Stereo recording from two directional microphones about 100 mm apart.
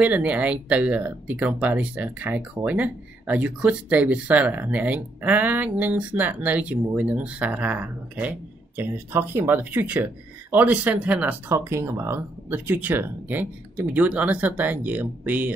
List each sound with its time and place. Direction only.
0.0 s speech: 15° right (ahead or behind)
11.5 s speech: 30° right (ahead or behind)